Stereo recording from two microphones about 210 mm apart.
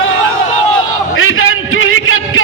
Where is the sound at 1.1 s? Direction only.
70° left (ahead or behind).